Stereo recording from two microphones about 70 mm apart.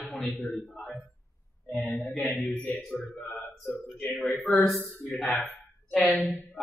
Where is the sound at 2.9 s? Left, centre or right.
Left.